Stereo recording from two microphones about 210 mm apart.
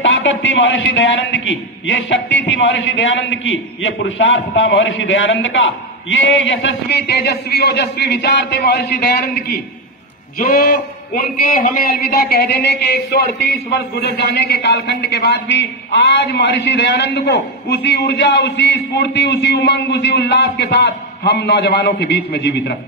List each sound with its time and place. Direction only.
0.0 s a man's voice: 60° left (ahead or behind)
10.4 s a man's voice: 45° left (ahead or behind)